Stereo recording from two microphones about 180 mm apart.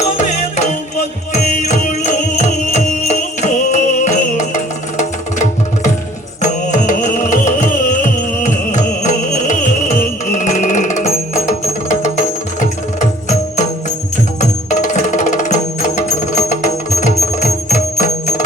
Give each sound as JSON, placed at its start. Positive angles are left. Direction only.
{"t": 0.0, "sound": "music", "side_deg": 40}